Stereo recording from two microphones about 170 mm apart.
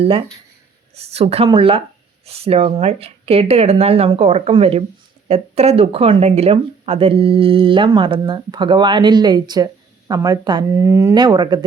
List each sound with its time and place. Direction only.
0.9 s speech: 35° right (ahead or behind)